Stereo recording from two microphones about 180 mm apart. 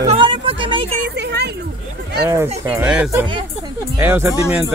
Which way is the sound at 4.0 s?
15° right (ahead or behind).